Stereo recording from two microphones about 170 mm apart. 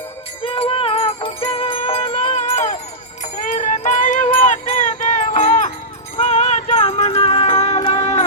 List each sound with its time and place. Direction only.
0.4 s music: 30° left (ahead or behind); by 4.3 s 45° left (ahead or behind)
4.3 s a sound: 40° left (ahead or behind)
5.2 s music: 40° left (ahead or behind)